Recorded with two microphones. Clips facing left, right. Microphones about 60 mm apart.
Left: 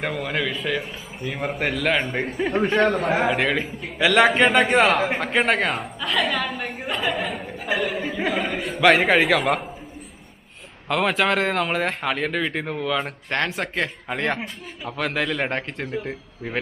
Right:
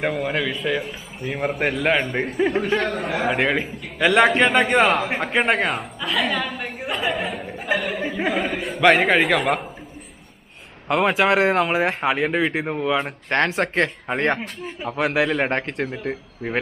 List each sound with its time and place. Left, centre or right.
0.0 s a man's voice: centre
7.8 s a sound: centre
8.3 s a man's voice: centre
10.8 s speech: centre
13.3 s speech: right
14.8 s speech: centre
15.4 s speech: right
15.9 s speech: right